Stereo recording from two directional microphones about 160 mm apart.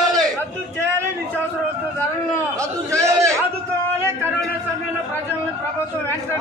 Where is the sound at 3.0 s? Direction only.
20° right (ahead or behind).